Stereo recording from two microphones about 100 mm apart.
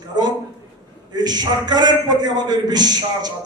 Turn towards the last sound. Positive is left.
turn(degrees=-45)  # may be behind; listen again after turning